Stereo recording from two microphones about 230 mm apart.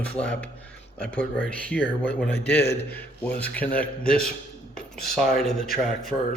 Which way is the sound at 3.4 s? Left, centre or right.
Centre.